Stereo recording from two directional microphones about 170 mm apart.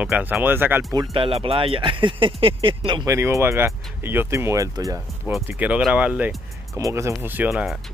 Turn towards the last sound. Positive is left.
turn(degrees=-5)  # may be behind; listen again after turning